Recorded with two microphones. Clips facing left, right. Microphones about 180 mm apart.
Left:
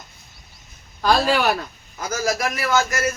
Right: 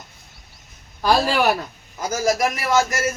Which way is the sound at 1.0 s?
10° right (ahead or behind).